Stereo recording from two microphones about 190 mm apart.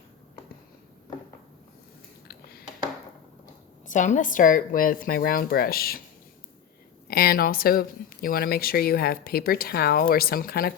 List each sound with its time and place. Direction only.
2.2 s a sound: 55° left (ahead or behind)
3.8 s speech: 40° left (ahead or behind)
7.1 s speech: 55° left (ahead or behind)